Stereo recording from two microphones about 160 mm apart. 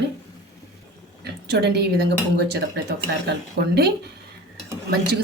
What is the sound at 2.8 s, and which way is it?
Speech, 90° right.